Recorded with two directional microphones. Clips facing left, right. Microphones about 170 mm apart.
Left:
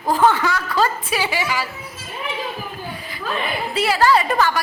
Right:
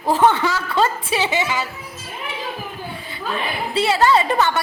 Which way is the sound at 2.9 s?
25° right (ahead or behind).